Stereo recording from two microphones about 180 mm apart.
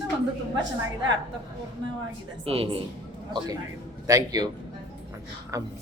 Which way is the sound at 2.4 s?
30° right (ahead or behind).